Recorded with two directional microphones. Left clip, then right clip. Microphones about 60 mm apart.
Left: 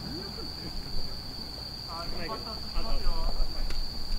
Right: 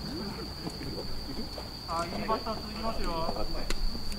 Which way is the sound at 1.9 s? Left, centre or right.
Right.